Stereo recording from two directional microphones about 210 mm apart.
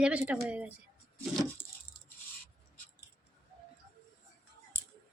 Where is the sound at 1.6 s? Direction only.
25° left (ahead or behind).